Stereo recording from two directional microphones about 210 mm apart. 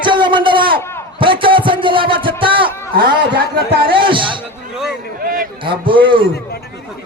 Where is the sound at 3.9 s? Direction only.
25° right (ahead or behind).